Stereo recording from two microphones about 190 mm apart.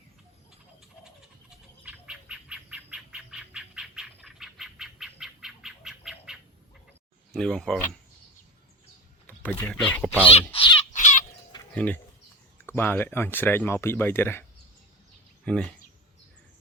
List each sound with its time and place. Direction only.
1.8 s bird: 5° right (ahead or behind)
7.3 s speech: 5° left (ahead or behind)
9.2 s speech: 10° left (ahead or behind)
10.2 s a sound: 30° left (ahead or behind)
10.9 s chicken: 40° left (ahead or behind)
11.7 s speech: 10° left (ahead or behind)
15.5 s speech: 5° left (ahead or behind)